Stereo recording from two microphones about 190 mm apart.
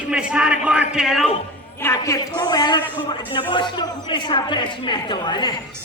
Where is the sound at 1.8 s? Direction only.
15° left (ahead or behind).